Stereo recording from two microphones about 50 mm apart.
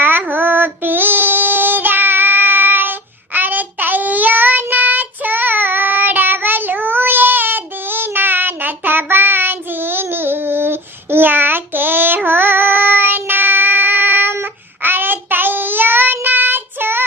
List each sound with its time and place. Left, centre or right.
0.0 s child singing: right